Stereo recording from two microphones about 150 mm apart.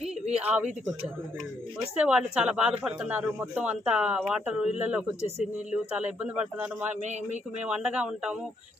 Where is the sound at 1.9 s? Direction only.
5° right (ahead or behind).